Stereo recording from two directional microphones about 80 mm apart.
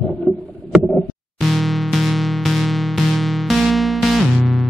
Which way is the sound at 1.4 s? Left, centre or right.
Centre.